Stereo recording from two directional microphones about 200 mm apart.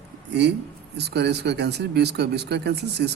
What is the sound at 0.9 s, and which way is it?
Speech, 55° right (ahead or behind).